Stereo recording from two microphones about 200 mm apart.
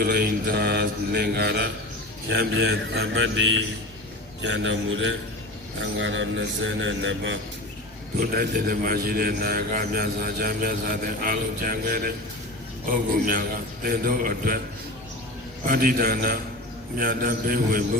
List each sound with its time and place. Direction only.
0.0 s a man's voice: 50° right (ahead or behind)
2.3 s a man's voice: 65° right (ahead or behind)
8.2 s a man's voice: 45° right (ahead or behind)
13.2 s a man's voice: 45° right (ahead or behind)
15.6 s a man's voice: 45° right (ahead or behind)